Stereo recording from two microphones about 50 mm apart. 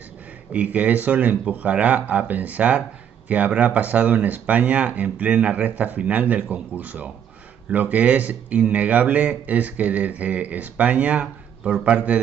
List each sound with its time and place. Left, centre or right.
0.5 s speech: right